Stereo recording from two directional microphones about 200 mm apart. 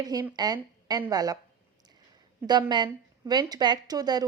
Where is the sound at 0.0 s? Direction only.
20° right (ahead or behind).